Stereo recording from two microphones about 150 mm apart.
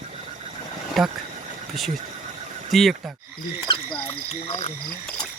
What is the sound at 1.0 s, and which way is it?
Speech, centre (ahead or behind).